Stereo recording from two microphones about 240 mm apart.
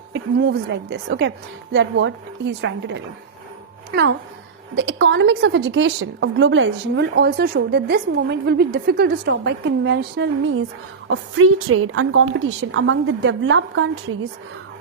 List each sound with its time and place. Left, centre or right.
0.1 s a woman's voice: right
4.7 s a woman's voice: right
11.3 s a woman's voice: right